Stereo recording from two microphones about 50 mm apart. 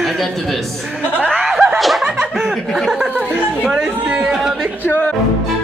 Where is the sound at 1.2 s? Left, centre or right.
Centre.